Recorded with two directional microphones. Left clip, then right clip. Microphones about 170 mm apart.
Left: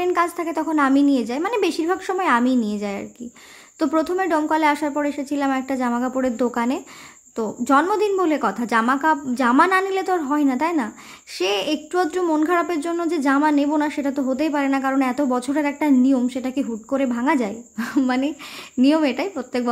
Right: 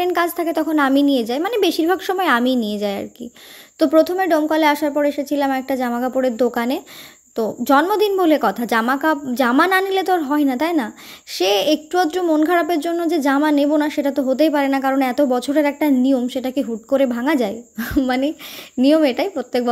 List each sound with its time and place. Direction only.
0.0 s a child's voice: 20° right (ahead or behind)